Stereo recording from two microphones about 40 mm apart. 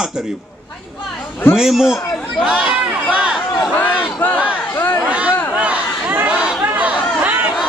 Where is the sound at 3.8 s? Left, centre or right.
Left.